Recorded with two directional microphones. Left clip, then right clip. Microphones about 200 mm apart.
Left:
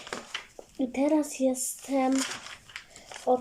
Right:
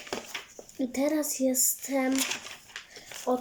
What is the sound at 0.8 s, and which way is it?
Speech, 5° right (ahead or behind).